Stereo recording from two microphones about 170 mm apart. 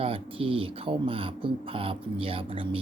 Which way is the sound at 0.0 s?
35° right (ahead or behind).